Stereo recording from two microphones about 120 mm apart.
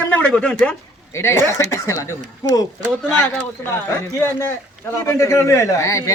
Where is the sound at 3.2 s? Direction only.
15° left (ahead or behind).